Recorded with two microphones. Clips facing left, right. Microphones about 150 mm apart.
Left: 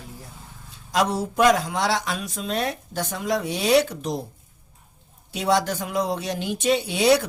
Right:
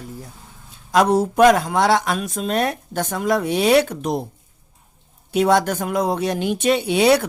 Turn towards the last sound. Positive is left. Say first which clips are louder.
# right 3 dB
turn(degrees=-60)  # may be behind; listen again after turning